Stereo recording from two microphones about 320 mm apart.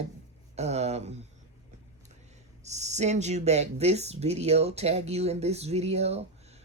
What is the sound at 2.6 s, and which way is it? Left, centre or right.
Speech, right.